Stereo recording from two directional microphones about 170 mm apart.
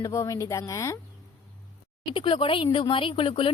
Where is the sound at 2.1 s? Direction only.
30° left (ahead or behind).